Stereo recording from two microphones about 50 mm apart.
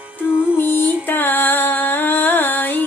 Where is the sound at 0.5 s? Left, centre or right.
Left.